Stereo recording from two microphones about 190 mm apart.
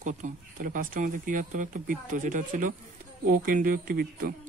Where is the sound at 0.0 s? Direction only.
40° right (ahead or behind).